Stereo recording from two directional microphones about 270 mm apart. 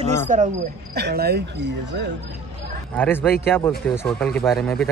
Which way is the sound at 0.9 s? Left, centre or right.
Right.